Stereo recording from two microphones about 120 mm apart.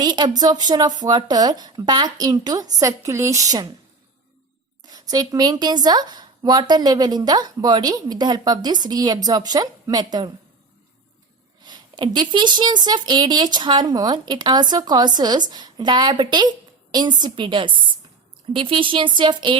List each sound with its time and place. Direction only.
0.0 s speech: 35° right (ahead or behind)
4.9 s speech: 35° right (ahead or behind)
11.6 s speech: 40° right (ahead or behind)